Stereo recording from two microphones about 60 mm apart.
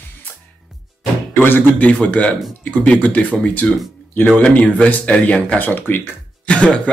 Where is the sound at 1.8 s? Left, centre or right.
Left.